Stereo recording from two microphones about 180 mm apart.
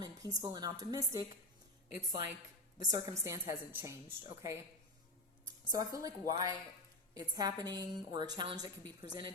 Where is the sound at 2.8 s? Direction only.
20° right (ahead or behind).